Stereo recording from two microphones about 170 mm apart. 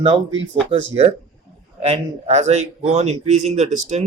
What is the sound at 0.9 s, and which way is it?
Speech, 35° right (ahead or behind).